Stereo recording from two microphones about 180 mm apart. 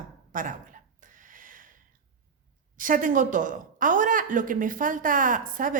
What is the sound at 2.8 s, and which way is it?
Speech, 50° right (ahead or behind).